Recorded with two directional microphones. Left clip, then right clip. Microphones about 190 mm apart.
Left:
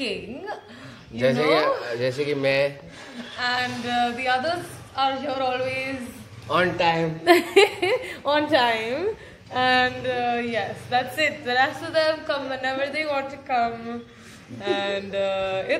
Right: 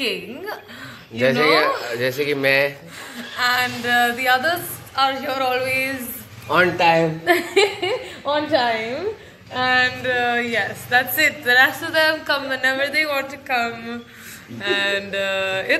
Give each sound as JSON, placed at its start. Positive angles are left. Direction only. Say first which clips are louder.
{"t": 0.0, "sound": "a woman's voice", "louder": "right 5 dB", "side_deg": 0}
{"t": 6.8, "sound": "a woman's voice", "louder": "right 6 dB", "side_deg": -20}
{"t": 7.2, "sound": "speech", "louder": "left 1 dB", "side_deg": 35}
{"t": 7.5, "sound": "a woman's voice", "louder": "even", "side_deg": 20}
{"t": 9.7, "sound": "a sound", "louder": "right 3 dB", "side_deg": 45}
{"t": 10.1, "sound": "a woman's voice", "louder": "right 5 dB", "side_deg": 0}